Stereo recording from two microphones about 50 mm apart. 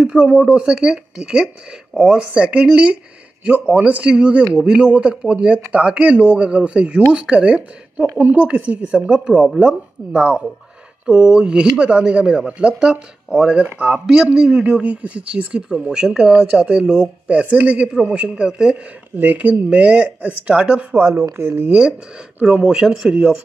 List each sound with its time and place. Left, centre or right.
0.0 s speech: centre
9.0 s speech: centre
13.7 s speech: right
14.0 s speech: centre
19.1 s speech: right
19.7 s speech: centre
20.9 s speech: right
22.4 s speech: centre